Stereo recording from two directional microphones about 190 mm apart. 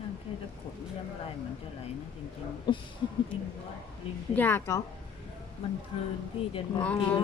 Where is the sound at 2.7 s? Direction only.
25° left (ahead or behind).